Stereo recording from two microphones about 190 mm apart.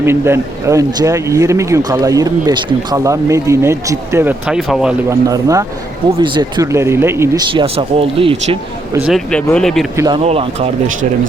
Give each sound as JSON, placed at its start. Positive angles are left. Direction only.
{"t": 0.0, "sound": "speech", "side_deg": -15}
{"t": 5.0, "sound": "speech", "side_deg": -15}
{"t": 7.5, "sound": "speech", "side_deg": -30}
{"t": 8.9, "sound": "speech", "side_deg": -10}
{"t": 9.1, "sound": "speech", "side_deg": 5}
{"t": 9.9, "sound": "speech", "side_deg": -15}
{"t": 10.2, "sound": "speech", "side_deg": -30}